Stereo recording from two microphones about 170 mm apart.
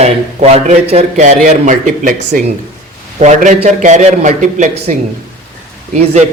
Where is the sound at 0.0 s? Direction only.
40° right (ahead or behind).